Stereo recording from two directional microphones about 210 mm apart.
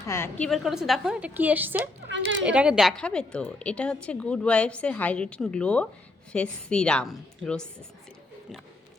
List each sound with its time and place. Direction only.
0.1 s a woman's voice: 10° left (ahead or behind); by 1.9 s 10° right (ahead or behind)
2.0 s speech: 60° right (ahead or behind)
2.5 s a woman's voice: 5° right (ahead or behind)